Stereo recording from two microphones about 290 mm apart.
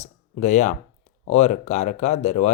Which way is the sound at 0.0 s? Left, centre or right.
Left.